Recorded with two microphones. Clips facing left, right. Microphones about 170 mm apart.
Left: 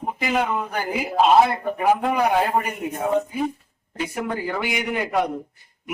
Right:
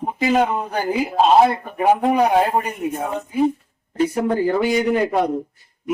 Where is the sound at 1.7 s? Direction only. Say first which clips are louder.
Right 4 dB; 30° right (ahead or behind).